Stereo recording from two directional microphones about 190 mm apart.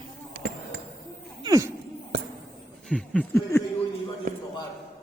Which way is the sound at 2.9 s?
5° left (ahead or behind).